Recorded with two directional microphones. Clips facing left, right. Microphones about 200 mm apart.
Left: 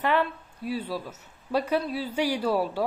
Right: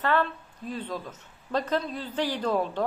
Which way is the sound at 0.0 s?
10° left (ahead or behind).